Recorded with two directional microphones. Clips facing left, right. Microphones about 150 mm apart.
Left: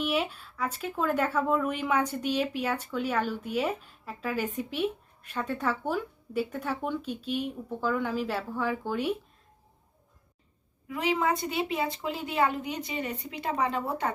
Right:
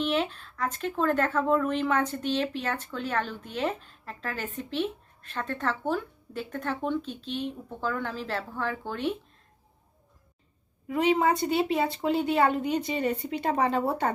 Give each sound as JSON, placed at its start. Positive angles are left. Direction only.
{"t": 0.0, "sound": "speech", "side_deg": 10}
{"t": 10.8, "sound": "a woman's voice", "side_deg": -35}